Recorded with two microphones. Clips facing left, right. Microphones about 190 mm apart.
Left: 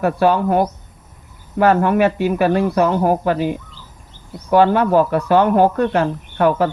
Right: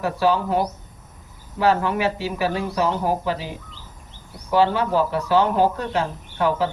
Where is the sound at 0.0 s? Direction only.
55° left (ahead or behind).